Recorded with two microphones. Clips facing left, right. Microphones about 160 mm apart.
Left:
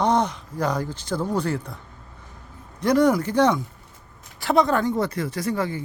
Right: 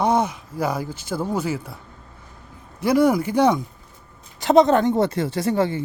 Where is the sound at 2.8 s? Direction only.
10° right (ahead or behind).